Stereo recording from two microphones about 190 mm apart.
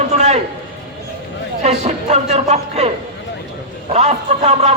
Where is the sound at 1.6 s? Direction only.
35° right (ahead or behind).